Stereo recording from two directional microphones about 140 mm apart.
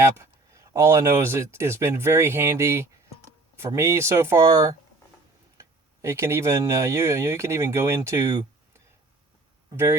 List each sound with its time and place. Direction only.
0.0 s speech: 20° right (ahead or behind)